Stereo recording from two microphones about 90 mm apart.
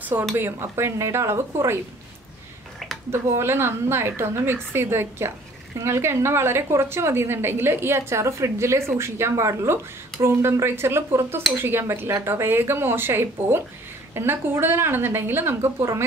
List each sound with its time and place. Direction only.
0.4 s speech: 25° right (ahead or behind)
3.1 s a woman's voice: 25° right (ahead or behind)